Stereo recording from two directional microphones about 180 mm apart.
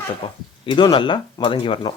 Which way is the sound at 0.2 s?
30° left (ahead or behind).